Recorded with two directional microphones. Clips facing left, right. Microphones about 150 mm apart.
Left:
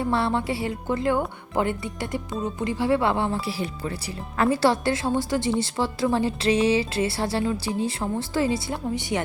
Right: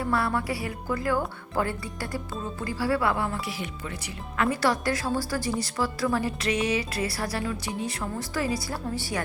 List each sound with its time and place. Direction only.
0.0 s speech: 25° left (ahead or behind)